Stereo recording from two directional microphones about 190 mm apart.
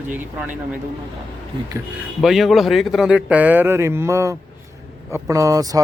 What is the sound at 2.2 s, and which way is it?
A man's voice, centre (ahead or behind).